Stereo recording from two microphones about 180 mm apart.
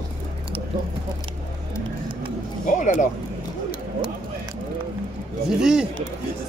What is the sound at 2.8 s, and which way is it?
Speech, 45° left (ahead or behind).